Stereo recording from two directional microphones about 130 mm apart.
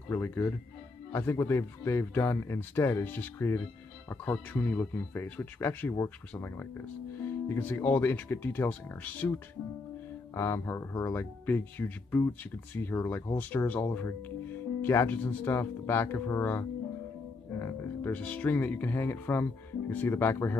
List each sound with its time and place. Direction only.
0.1 s speech: 15° left (ahead or behind)